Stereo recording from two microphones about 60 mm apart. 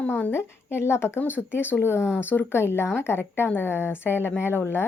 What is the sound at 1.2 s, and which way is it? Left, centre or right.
A woman's voice, left.